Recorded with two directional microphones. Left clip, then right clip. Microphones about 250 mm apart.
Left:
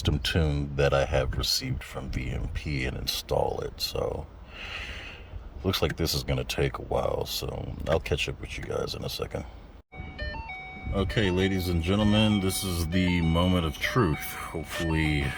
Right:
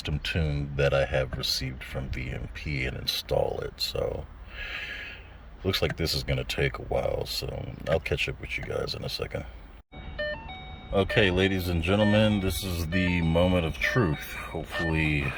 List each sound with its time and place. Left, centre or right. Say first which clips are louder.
0.0 s speech: left 3 dB; centre
4.6 s snort: right 2 dB; centre
5.6 s speech: even; centre
11.0 s speech: right 3 dB; centre